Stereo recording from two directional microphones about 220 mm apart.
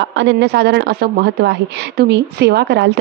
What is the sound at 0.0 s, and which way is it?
A woman's voice, 55° right (ahead or behind).